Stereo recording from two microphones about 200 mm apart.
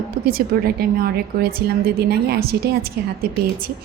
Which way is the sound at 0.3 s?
50° right (ahead or behind).